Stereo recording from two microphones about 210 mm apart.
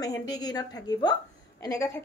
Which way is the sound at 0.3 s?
20° left (ahead or behind).